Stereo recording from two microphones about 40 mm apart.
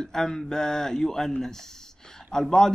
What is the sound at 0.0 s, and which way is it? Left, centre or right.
A man's voice, centre.